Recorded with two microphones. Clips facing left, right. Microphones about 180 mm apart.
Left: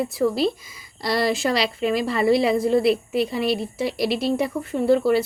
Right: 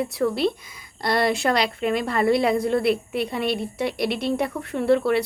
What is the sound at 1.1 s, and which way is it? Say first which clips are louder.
A woman's voice: even; 55° right (ahead or behind).